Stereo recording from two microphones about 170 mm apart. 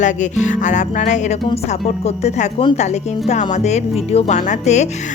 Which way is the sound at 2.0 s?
40° left (ahead or behind).